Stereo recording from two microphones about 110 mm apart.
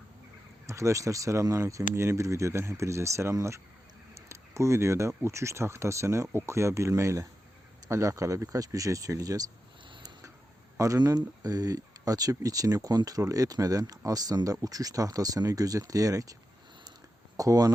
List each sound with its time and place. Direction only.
0.7 s speech: 25° right (ahead or behind)
9.9 s a sound: 35° right (ahead or behind)
10.8 s speech: 35° right (ahead or behind)
17.3 s speech: 30° right (ahead or behind)